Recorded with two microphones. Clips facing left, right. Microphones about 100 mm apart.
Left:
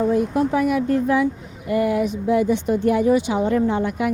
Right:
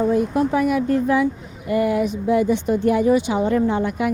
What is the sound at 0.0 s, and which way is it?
A woman's voice, 25° right (ahead or behind).